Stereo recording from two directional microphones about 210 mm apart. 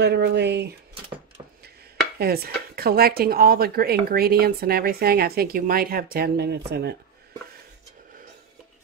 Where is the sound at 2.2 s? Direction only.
45° right (ahead or behind).